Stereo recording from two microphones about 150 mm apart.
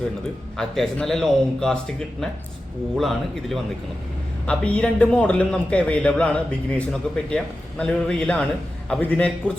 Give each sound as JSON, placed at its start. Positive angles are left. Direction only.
{"t": 0.5, "sound": "a man's voice", "side_deg": 5}
{"t": 3.0, "sound": "a man's voice", "side_deg": 0}